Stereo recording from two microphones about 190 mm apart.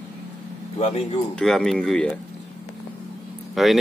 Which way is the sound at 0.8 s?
30° left (ahead or behind).